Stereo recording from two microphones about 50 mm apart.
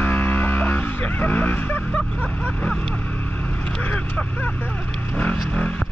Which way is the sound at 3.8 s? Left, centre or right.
Left.